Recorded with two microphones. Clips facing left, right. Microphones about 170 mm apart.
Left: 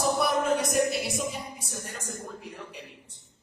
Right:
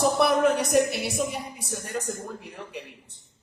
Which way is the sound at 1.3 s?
65° right (ahead or behind).